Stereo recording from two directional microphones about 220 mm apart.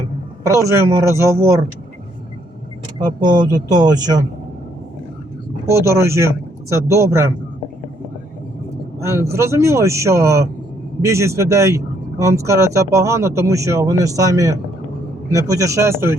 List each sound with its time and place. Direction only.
0.4 s speech: 15° right (ahead or behind)
3.0 s speech: 20° right (ahead or behind)
5.6 s speech: 15° right (ahead or behind)
9.0 s speech: 10° right (ahead or behind)